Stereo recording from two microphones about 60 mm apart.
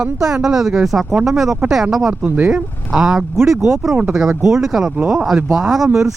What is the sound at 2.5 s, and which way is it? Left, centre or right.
Speech, centre.